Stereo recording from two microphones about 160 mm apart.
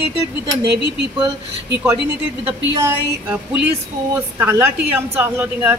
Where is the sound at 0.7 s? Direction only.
90° right.